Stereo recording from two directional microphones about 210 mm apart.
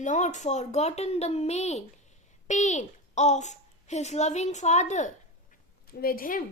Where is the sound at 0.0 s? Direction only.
35° left (ahead or behind).